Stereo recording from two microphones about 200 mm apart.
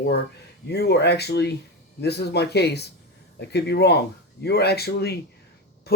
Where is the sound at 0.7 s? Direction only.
55° left (ahead or behind).